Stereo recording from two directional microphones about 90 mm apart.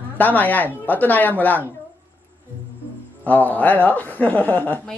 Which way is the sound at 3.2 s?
20° left (ahead or behind).